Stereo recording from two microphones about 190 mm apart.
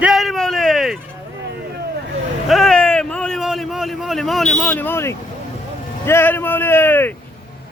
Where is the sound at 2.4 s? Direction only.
Centre (ahead or behind).